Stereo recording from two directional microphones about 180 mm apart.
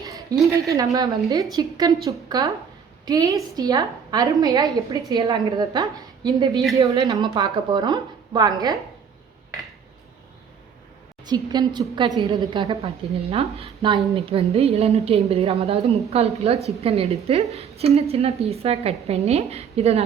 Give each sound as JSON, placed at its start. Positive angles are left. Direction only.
{"t": 0.0, "sound": "a sound", "side_deg": -20}
{"t": 0.3, "sound": "a woman's voice", "side_deg": 0}
{"t": 0.9, "sound": "a woman's voice", "side_deg": -20}
{"t": 11.3, "sound": "a woman's voice", "side_deg": -25}
{"t": 13.3, "sound": "a woman's voice", "side_deg": -35}